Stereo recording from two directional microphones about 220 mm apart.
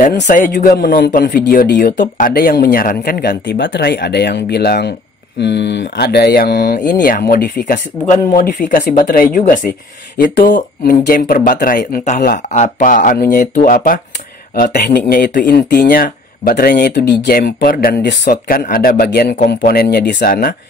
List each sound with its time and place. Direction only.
0.0 s speech: 35° left (ahead or behind)